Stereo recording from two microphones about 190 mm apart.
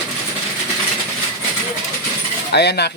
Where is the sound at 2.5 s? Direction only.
60° left (ahead or behind).